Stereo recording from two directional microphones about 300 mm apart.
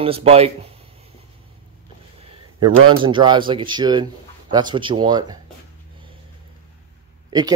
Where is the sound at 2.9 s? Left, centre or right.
Centre.